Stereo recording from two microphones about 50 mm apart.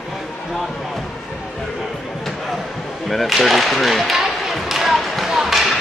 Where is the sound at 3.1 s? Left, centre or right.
Centre.